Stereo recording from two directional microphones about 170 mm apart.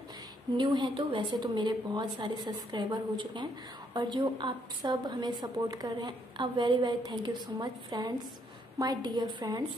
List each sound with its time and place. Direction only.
0.6 s a woman's voice: 25° right (ahead or behind)